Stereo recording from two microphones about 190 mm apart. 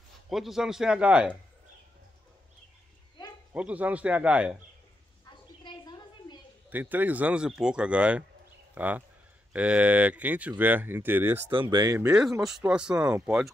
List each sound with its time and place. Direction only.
0.3 s speech: centre (ahead or behind)
3.5 s speech: 5° right (ahead or behind)
5.6 s a sound: 25° left (ahead or behind)
6.7 s speech: 10° right (ahead or behind)
11.5 s speech: 25° right (ahead or behind)
12.1 s speech: centre (ahead or behind)